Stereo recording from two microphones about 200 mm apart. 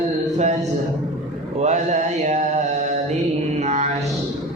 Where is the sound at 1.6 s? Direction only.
35° right (ahead or behind).